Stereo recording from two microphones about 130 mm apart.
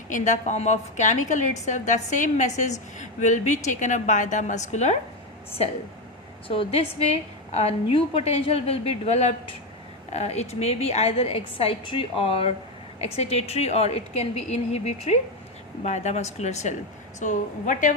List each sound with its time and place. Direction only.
0.1 s a woman's voice: 65° left (ahead or behind)
6.5 s a woman's voice: 45° left (ahead or behind)
17.2 s a woman's voice: 70° left (ahead or behind)